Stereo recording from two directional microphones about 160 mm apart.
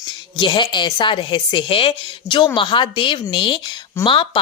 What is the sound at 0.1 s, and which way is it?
Speech, 30° left (ahead or behind).